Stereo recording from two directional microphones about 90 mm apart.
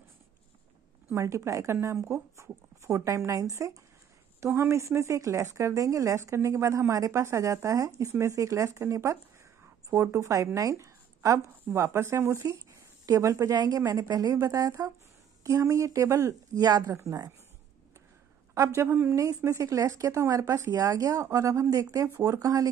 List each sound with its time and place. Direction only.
1.1 s a woman's voice: 35° right (ahead or behind)
18.8 s a woman's voice: 30° right (ahead or behind)